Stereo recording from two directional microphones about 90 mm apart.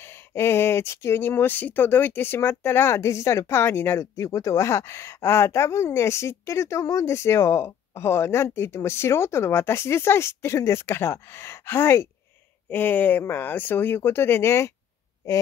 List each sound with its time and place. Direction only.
0.0 s speech: 25° left (ahead or behind)